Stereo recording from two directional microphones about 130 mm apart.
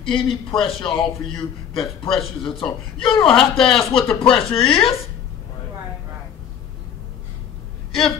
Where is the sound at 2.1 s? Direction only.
Centre (ahead or behind).